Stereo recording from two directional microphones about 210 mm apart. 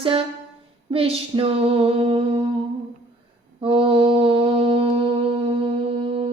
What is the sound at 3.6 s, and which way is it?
Mantra, 25° right (ahead or behind).